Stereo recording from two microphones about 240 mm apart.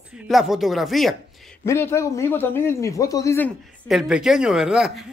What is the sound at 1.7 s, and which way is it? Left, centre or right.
A man's voice, centre.